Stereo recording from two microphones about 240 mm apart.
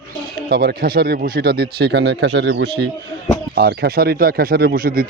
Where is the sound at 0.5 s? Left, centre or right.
Right.